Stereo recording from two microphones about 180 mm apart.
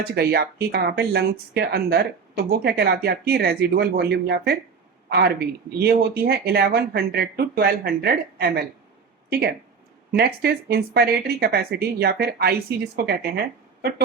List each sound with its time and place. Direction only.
0.0 s speech: 60° right (ahead or behind)
10.1 s speech: 60° right (ahead or behind)